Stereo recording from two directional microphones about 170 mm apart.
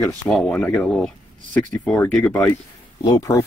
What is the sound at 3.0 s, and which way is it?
Speech, 20° left (ahead or behind).